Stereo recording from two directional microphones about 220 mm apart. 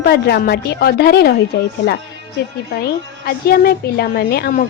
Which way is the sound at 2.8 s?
45° left (ahead or behind).